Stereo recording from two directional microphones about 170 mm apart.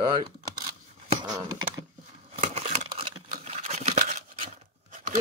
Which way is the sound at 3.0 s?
40° right (ahead or behind).